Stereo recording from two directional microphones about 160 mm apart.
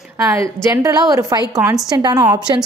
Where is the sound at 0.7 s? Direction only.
20° right (ahead or behind).